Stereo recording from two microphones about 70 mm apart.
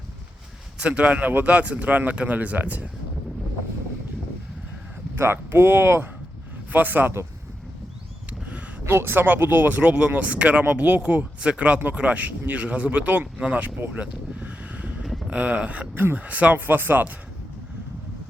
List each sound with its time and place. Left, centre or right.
0.8 s speech: centre
5.1 s speech: right
8.9 s speech: right
9.2 s speech: right